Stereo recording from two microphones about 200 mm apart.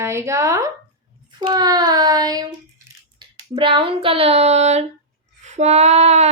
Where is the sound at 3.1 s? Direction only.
25° right (ahead or behind).